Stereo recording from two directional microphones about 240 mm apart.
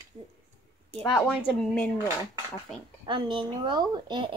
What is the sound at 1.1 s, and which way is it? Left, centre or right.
Speech, centre.